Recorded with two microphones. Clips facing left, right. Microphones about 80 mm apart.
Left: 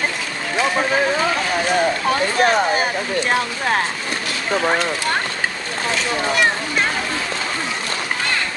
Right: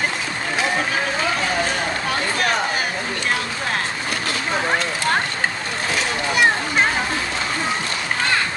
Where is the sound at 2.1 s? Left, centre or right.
Left.